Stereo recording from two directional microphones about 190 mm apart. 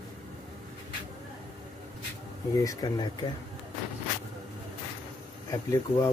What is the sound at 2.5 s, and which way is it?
Speech, 20° left (ahead or behind).